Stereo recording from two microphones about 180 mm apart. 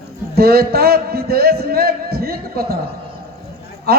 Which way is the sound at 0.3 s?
60° right (ahead or behind).